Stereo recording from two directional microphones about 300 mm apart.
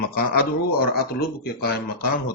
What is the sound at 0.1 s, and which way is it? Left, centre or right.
Speech, left.